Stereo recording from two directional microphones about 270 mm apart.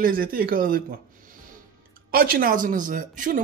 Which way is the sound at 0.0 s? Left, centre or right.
Right.